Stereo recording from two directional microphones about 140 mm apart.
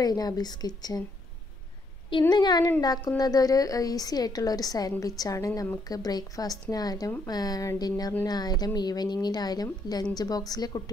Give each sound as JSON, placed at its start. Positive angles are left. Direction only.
{"t": 0.0, "sound": "a woman's voice", "side_deg": 30}
{"t": 2.0, "sound": "a woman's voice", "side_deg": 35}